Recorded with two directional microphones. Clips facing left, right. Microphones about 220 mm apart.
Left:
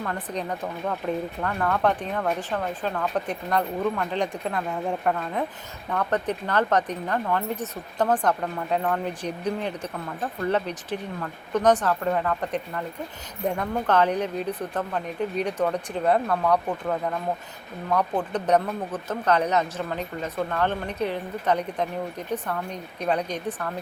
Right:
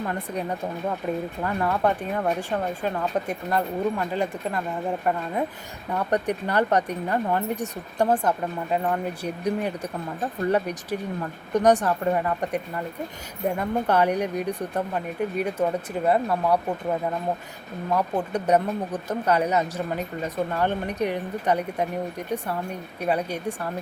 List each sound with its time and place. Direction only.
0.0 s speech: 15° right (ahead or behind)
17.9 s speech: 10° right (ahead or behind)